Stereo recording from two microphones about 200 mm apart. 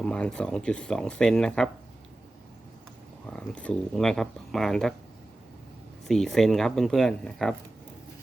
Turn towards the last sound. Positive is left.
turn(degrees=0)  # may be behind; listen again after turning